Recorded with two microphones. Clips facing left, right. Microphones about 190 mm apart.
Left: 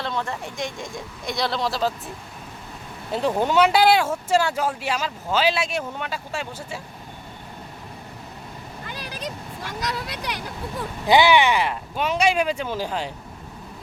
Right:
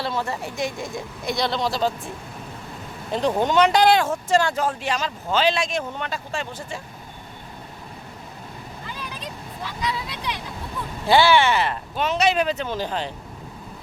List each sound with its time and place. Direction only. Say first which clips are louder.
0.0 s speech: right 2 dB; 5° right (ahead or behind)
3.1 s speech: right 1 dB; 5° left (ahead or behind)
8.9 s vehicle: left 3 dB; 75° left (ahead or behind)
9.6 s speech: right 1 dB; 50° left (ahead or behind)
11.0 s speech: even; 15° left (ahead or behind)